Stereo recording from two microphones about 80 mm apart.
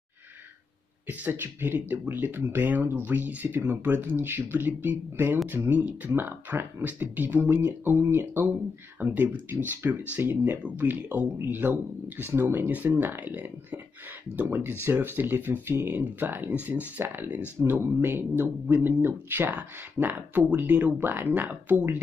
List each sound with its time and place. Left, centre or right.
1.0 s speech: right